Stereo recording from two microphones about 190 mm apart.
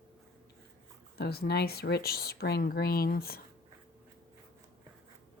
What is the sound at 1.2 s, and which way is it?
Speech, 55° left (ahead or behind).